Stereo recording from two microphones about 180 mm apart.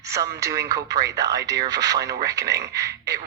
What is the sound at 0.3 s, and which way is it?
Speech, 20° right (ahead or behind).